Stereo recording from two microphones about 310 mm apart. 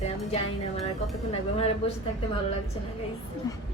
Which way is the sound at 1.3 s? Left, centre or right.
Centre.